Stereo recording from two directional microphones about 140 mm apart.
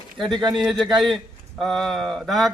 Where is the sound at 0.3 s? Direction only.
35° right (ahead or behind).